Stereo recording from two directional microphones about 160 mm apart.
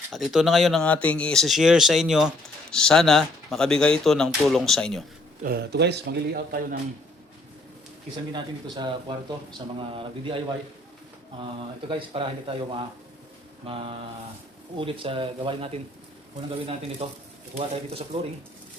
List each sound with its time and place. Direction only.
0.1 s speech: centre (ahead or behind)
5.4 s a man's voice: 80° right
8.1 s speech: 30° right (ahead or behind)
11.9 s speech: 35° right (ahead or behind)